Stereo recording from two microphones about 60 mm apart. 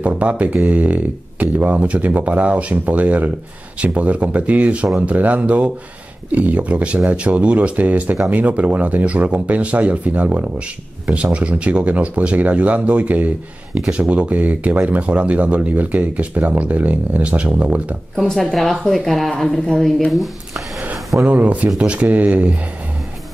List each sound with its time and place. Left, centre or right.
0.0 s speech: right
18.1 s speech: centre
20.1 s a sound: centre
21.3 s speech: right